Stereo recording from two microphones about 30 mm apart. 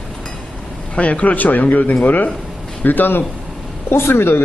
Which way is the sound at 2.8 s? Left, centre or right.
Left.